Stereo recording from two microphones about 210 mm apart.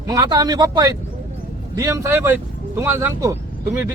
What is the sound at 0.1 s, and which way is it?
Speech, 20° right (ahead or behind).